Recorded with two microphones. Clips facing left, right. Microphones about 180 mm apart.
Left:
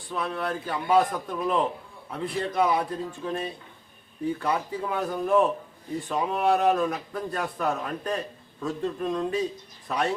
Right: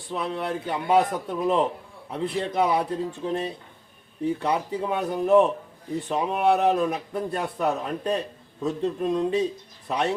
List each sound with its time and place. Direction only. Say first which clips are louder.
0.1 s speech: right 1 dB; 25° right (ahead or behind)